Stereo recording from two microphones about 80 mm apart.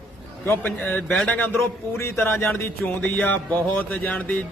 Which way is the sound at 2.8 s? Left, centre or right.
Centre.